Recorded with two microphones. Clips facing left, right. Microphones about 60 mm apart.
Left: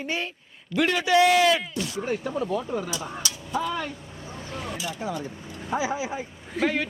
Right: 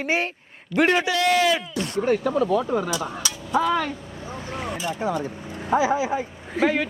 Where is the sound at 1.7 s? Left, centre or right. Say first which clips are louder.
Right 6 dB; right.